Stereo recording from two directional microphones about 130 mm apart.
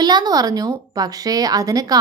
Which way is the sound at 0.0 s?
30° right (ahead or behind).